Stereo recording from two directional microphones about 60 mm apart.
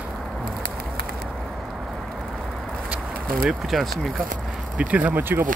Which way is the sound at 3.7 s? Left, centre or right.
Centre.